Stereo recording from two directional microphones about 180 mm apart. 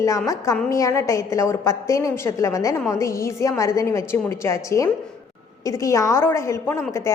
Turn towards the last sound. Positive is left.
turn(degrees=15)  # may be behind; listen again after turning